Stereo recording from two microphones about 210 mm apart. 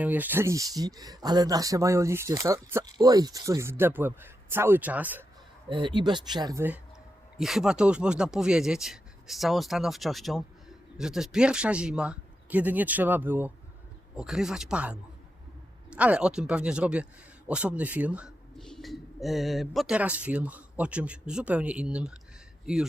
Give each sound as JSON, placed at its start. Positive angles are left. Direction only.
{"t": 0.0, "sound": "speech", "side_deg": -10}
{"t": 5.6, "sound": "speech", "side_deg": -25}
{"t": 7.3, "sound": "a man's voice", "side_deg": 0}